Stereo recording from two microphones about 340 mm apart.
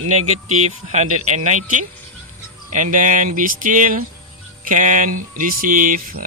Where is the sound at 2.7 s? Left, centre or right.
Right.